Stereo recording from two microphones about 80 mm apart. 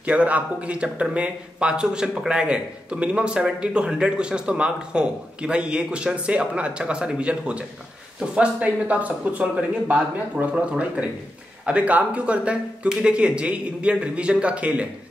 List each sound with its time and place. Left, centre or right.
0.0 s speech: centre